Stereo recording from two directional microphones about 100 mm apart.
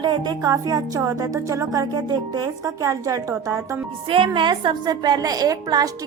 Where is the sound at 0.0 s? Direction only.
45° right (ahead or behind).